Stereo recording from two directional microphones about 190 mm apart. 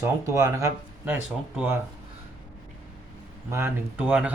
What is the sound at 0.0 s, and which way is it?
Speech, 15° right (ahead or behind).